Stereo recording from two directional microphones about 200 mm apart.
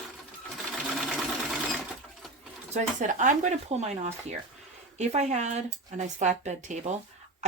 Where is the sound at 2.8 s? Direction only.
40° right (ahead or behind).